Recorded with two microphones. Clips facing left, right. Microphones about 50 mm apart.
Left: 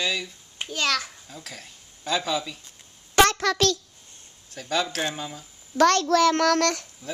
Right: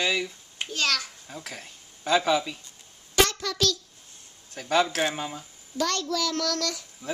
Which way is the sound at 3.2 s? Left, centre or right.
Left.